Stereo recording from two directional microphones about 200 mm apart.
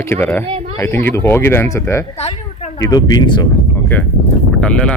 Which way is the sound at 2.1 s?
30° left (ahead or behind).